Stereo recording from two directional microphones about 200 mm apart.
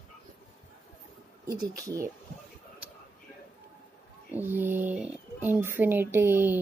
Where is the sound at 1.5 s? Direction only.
15° right (ahead or behind).